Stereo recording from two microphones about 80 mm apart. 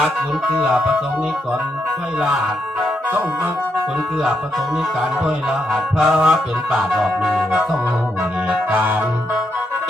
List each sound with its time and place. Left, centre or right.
5.7 s music: centre
8.7 s music: centre